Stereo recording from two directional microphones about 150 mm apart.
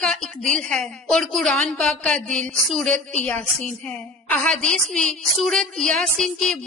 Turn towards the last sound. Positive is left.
turn(degrees=5)  # may be behind; listen again after turning